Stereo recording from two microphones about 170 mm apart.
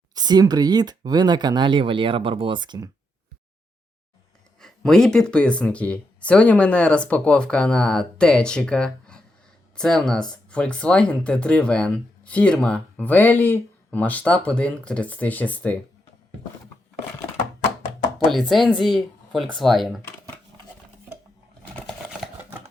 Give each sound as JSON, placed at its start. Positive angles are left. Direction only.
{"t": 0.1, "sound": "speech", "side_deg": -25}
{"t": 4.6, "sound": "speech", "side_deg": 5}
{"t": 18.3, "sound": "speech", "side_deg": 0}